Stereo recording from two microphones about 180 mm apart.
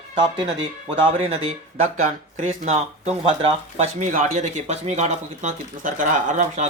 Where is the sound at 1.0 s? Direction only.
35° right (ahead or behind).